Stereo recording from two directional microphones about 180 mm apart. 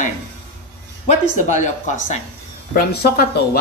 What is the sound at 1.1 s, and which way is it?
A woman's voice, 40° left (ahead or behind).